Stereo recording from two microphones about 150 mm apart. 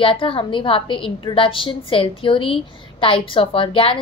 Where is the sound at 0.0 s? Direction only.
35° left (ahead or behind).